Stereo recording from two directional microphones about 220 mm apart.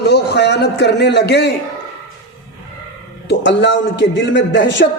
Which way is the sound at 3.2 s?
55° left (ahead or behind).